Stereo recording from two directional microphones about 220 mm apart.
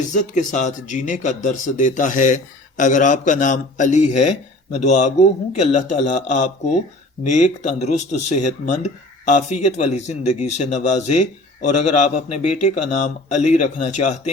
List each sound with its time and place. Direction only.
0.1 s speech: 35° left (ahead or behind)